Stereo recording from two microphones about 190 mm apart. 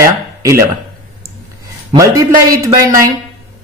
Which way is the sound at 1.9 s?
15° right (ahead or behind).